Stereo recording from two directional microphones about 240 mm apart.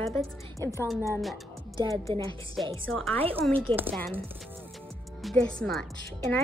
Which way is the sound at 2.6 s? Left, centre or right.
Centre.